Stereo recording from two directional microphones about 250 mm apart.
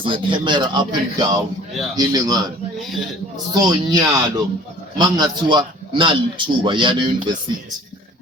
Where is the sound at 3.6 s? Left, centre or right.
Centre.